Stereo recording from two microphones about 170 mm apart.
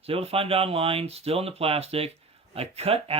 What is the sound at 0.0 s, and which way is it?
Speech, 35° right (ahead or behind).